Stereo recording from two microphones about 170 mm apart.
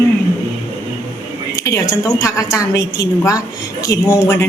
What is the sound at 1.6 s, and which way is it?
A woman's voice, 20° left (ahead or behind).